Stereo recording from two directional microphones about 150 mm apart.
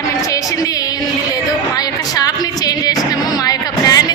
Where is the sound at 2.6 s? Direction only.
25° left (ahead or behind).